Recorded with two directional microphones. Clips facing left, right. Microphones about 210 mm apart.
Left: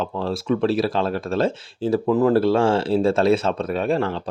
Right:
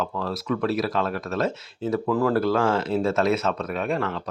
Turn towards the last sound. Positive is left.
turn(degrees=30)  # may be behind; listen again after turning